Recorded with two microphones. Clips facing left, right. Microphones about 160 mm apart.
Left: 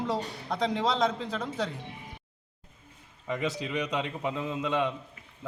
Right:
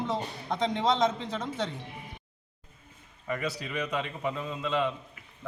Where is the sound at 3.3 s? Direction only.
20° left (ahead or behind).